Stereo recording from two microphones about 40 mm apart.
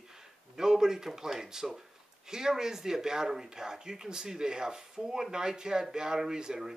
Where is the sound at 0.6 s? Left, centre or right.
Centre.